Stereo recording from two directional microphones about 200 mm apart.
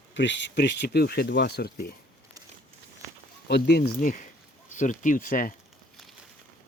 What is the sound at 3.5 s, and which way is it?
Speech, 55° left (ahead or behind).